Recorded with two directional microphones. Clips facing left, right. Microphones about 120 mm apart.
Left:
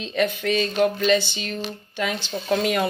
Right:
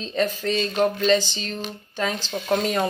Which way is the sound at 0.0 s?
35° right (ahead or behind).